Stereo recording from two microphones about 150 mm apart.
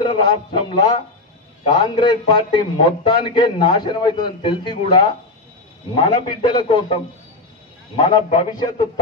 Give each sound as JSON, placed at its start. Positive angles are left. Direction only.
{"t": 0.0, "sound": "a man's voice", "side_deg": 30}
{"t": 6.1, "sound": "a man's voice", "side_deg": 30}